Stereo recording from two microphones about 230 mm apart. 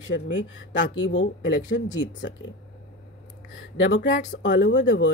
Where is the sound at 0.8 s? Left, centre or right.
Left.